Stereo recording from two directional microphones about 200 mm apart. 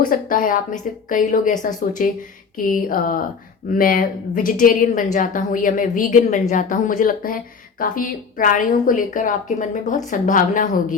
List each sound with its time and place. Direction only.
0.0 s speech: 45° left (ahead or behind)